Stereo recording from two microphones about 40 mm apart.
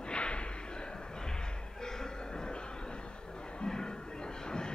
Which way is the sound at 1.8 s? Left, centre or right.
Centre.